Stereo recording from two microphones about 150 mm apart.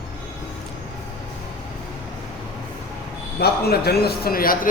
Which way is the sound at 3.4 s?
90° left.